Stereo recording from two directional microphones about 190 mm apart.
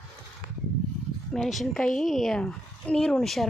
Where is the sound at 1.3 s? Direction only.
Centre (ahead or behind).